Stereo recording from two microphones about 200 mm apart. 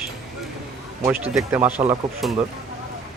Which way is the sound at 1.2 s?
5° right (ahead or behind).